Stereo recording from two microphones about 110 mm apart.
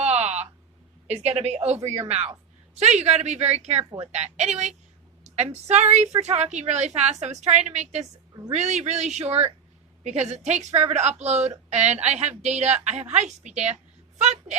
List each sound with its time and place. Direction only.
0.0 s a sound: 85° right
1.0 s a woman's voice: 75° right (ahead or behind)
10.0 s a woman's voice: 90° right